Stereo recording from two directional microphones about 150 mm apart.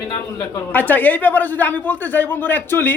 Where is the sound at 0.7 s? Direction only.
10° left (ahead or behind).